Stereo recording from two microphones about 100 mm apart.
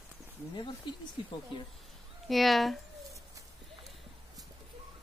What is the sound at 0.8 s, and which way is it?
Speech, 50° left (ahead or behind).